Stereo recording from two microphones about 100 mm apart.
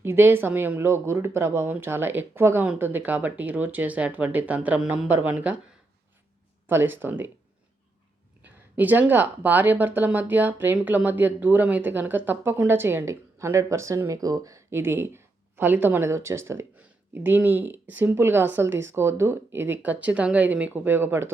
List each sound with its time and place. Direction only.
0.0 s speech: 20° right (ahead or behind)
6.7 s speech: 20° right (ahead or behind)
8.4 s speech: 15° right (ahead or behind)